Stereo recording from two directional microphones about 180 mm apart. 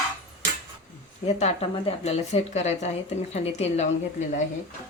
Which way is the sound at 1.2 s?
35° left (ahead or behind).